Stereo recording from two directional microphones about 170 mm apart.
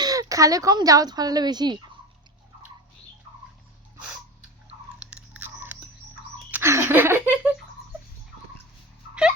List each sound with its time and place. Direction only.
0.0 s speech: 20° right (ahead or behind)
4.9 s biting: 5° right (ahead or behind)
6.5 s a sound: 15° right (ahead or behind)